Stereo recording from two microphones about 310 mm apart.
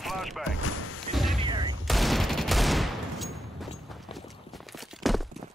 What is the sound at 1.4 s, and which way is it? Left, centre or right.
Fusillade, centre.